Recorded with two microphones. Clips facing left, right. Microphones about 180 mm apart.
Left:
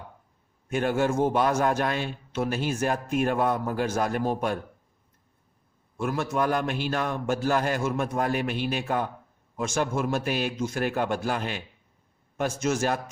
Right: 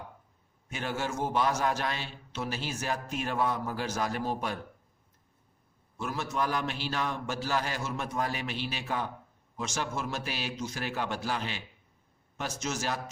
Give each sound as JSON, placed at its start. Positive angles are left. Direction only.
{"t": 0.7, "sound": "a man's voice", "side_deg": 55}
{"t": 6.0, "sound": "a man's voice", "side_deg": 55}